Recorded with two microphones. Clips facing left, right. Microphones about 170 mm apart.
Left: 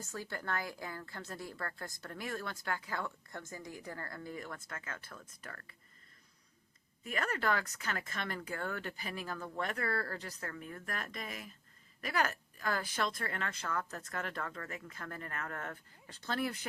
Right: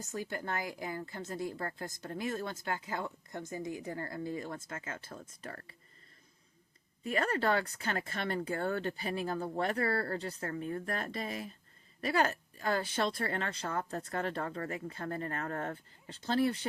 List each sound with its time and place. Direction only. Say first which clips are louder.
0.0 s speech: right 4 dB; 20° right (ahead or behind)
7.0 s speech: right 4 dB; 30° right (ahead or behind)